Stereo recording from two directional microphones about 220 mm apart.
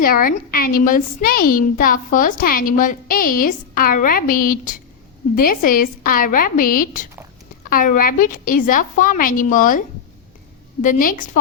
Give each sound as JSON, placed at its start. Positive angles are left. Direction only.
{"t": 0.0, "sound": "a woman's voice", "side_deg": 40}
{"t": 10.8, "sound": "a woman's voice", "side_deg": 40}